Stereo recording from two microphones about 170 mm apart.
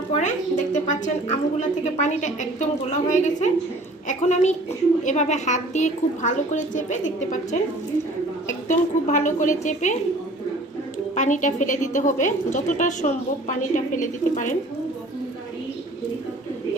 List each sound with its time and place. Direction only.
0.1 s a woman's voice: 45° left (ahead or behind)
8.6 s a woman's voice: 45° left (ahead or behind)
11.1 s a woman's voice: 45° left (ahead or behind)